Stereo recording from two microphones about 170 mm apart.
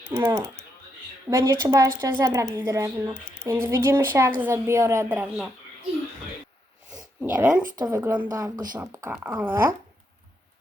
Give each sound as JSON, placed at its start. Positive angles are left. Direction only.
{"t": 0.1, "sound": "speech", "side_deg": -15}
{"t": 7.2, "sound": "speech", "side_deg": -10}